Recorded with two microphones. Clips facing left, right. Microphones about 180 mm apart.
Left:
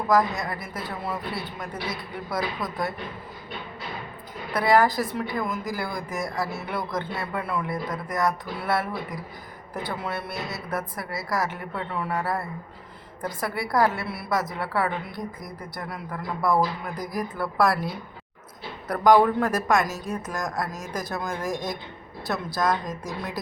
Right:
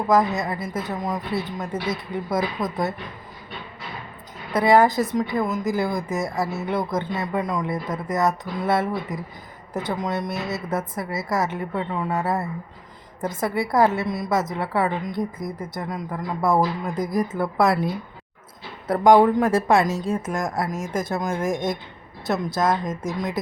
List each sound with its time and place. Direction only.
0.1 s speech: 20° right (ahead or behind)
4.5 s speech: 20° right (ahead or behind)
18.9 s speech: 25° right (ahead or behind)